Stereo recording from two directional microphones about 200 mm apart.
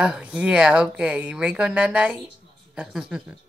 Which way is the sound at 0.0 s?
5° right (ahead or behind).